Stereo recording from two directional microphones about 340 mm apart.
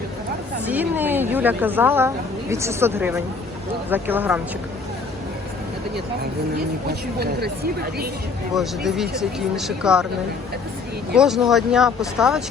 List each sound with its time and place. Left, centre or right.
0.6 s a woman's voice: centre
7.2 s speech: right
8.5 s a woman's voice: centre
11.1 s a woman's voice: centre